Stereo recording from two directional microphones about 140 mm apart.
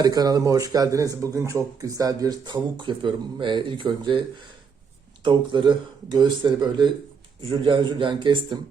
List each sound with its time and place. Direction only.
0.0 s speech: 25° right (ahead or behind)
5.2 s speech: 35° right (ahead or behind)